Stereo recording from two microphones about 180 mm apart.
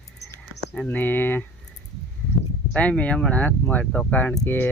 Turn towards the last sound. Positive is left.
turn(degrees=10)  # may be behind; listen again after turning